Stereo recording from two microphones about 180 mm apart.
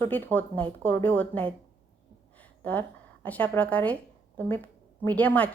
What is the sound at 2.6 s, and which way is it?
A woman's voice, 10° left (ahead or behind).